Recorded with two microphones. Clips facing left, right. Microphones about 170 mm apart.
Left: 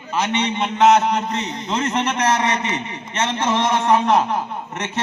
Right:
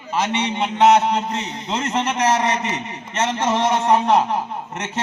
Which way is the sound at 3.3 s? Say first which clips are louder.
Even; 40° right (ahead or behind).